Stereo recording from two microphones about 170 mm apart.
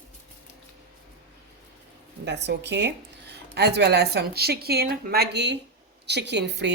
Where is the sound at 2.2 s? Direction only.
90° right.